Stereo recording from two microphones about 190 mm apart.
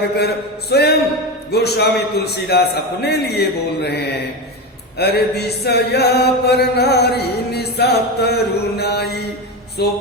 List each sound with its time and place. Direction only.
0.7 s chant: 60° left (ahead or behind)